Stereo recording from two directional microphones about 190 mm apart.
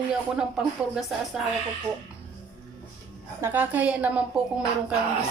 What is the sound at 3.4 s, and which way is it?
A woman's voice, 10° right (ahead or behind).